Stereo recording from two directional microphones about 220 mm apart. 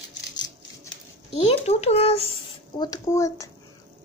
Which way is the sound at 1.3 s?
30° left (ahead or behind).